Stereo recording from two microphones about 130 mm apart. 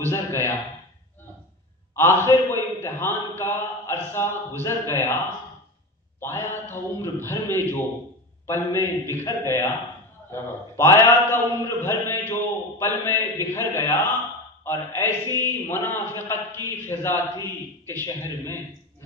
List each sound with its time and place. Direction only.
0.0 s a man's voice: 20° left (ahead or behind)
2.0 s a man's voice: 20° left (ahead or behind)
6.2 s a man's voice: 20° left (ahead or behind)